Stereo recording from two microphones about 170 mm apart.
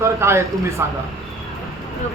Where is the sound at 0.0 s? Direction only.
15° right (ahead or behind).